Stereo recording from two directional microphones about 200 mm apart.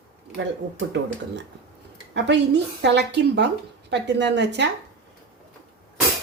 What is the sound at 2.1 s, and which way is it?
Speech, 60° right (ahead or behind).